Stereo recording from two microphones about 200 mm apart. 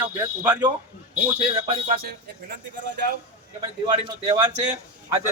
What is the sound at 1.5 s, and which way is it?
Speech, 30° right (ahead or behind).